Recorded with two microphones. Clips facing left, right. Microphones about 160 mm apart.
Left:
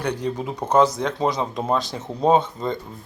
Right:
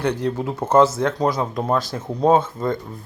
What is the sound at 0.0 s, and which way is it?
Speech, 10° left (ahead or behind).